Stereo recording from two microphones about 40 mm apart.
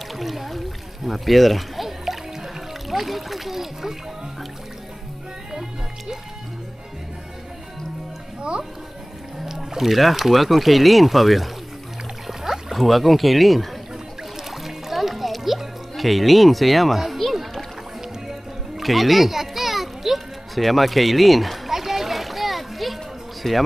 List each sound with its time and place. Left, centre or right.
0.1 s a sound: centre
2.9 s speech: centre
5.5 s speech: centre
8.4 s speech: right
9.4 s speech: centre
14.5 s music: centre
23.4 s speech: centre